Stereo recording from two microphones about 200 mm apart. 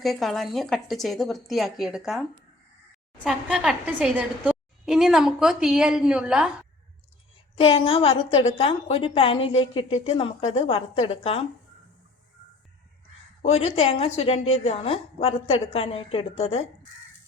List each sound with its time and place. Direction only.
0.0 s a woman's voice: centre (ahead or behind)
3.2 s a woman's voice: 5° right (ahead or behind)
7.6 s a woman's voice: 30° left (ahead or behind)
13.4 s a woman's voice: 30° left (ahead or behind)